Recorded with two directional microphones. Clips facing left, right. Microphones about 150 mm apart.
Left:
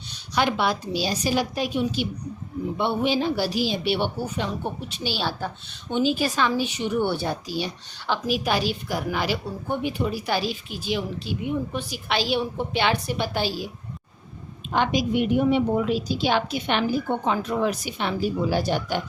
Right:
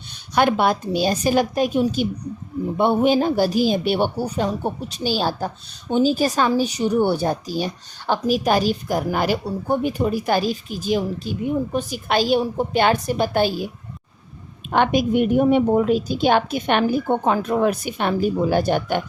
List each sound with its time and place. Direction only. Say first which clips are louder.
0.3 s a woman's voice: right 5 dB; 50° right (ahead or behind)
14.7 s a woman's voice: right 5 dB; 55° right (ahead or behind)